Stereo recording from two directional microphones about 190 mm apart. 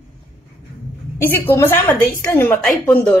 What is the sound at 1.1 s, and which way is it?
A woman's voice, 10° left (ahead or behind).